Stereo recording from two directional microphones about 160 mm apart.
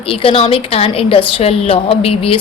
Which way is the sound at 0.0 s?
35° left (ahead or behind).